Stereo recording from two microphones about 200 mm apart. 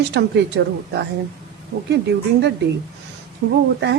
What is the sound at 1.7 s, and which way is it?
Speech, 55° right (ahead or behind).